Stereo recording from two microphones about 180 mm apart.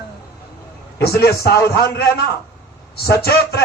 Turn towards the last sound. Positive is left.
turn(degrees=60)  # may be behind; listen again after turning